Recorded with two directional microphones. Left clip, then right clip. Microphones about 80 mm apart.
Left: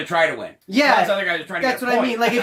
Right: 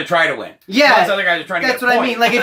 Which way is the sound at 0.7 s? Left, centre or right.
Left.